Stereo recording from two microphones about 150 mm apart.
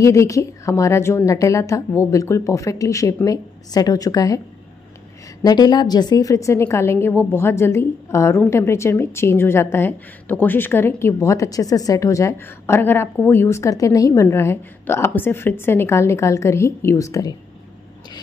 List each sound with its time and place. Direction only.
0.0 s a woman's voice: 20° left (ahead or behind)
5.4 s a woman's voice: 25° left (ahead or behind)